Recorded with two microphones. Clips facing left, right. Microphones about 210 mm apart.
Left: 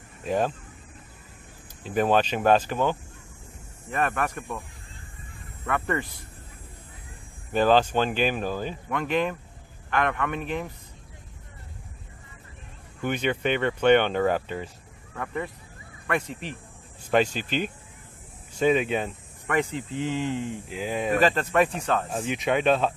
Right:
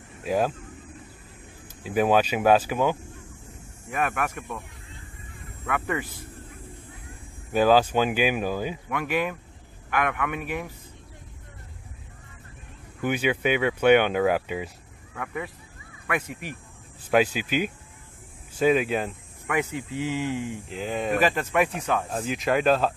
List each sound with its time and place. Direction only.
0.2 s speech: 5° right (ahead or behind)
1.8 s speech: 5° right (ahead or behind)
5.7 s speech: 5° right (ahead or behind)
7.5 s speech: 10° right (ahead or behind)
13.0 s speech: 5° right (ahead or behind)
20.6 s speech: 5° left (ahead or behind)
21.2 s speech: 10° right (ahead or behind)